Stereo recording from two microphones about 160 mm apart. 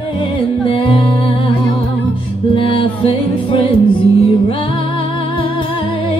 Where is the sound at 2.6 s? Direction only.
35° left (ahead or behind).